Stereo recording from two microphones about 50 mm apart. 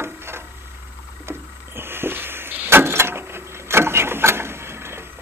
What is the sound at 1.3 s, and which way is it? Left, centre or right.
Vehicle, right.